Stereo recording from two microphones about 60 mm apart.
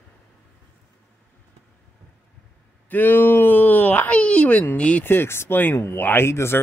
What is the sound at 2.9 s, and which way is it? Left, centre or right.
Speech, left.